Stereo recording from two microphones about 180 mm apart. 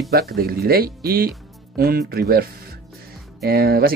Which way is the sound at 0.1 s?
60° right (ahead or behind).